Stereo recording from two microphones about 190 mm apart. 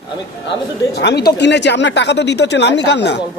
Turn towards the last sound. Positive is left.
turn(degrees=65)  # may be behind; listen again after turning